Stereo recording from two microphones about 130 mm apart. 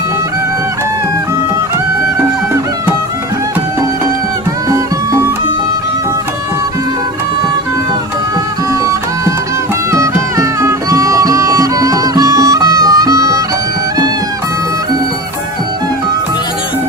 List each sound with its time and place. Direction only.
8.8 s music: 25° right (ahead or behind)